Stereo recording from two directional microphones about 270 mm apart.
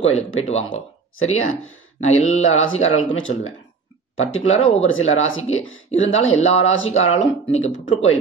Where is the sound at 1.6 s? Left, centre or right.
Left.